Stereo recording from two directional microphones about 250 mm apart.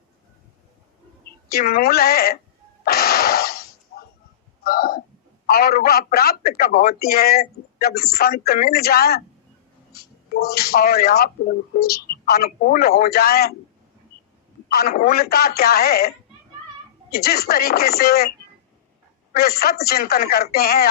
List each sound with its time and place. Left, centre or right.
1.5 s a woman's voice: left
2.8 s a sound: left
5.5 s a woman's voice: left
9.9 s a sound: left
10.5 s a woman's voice: left
14.7 s a woman's voice: left
19.3 s a woman's voice: left